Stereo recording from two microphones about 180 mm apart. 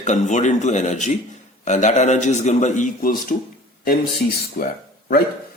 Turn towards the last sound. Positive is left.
turn(degrees=55)  # may be behind; listen again after turning